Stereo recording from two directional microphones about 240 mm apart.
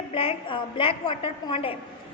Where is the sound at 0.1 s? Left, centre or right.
Left.